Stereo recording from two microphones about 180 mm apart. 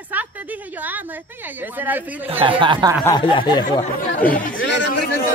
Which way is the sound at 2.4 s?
25° right (ahead or behind).